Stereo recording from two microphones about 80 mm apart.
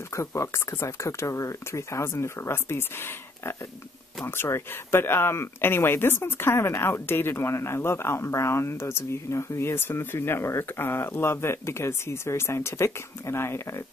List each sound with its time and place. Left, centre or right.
0.1 s speech: left